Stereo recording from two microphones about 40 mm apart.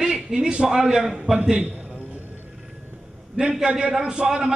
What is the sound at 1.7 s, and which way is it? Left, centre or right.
Music, right.